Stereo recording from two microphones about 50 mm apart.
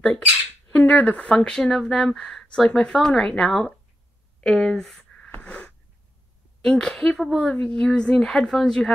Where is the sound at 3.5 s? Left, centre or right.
Centre.